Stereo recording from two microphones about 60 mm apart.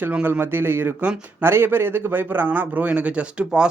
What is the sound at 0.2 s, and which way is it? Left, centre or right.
A man's voice, right.